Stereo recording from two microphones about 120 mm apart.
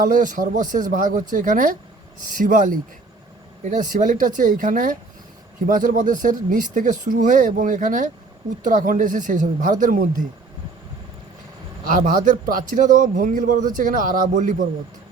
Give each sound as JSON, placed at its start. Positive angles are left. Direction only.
{"t": 0.1, "sound": "speech", "side_deg": -90}
{"t": 12.7, "sound": "speech", "side_deg": -90}